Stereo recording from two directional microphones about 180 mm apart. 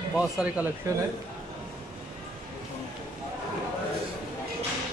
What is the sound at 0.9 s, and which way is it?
Speech, 15° right (ahead or behind).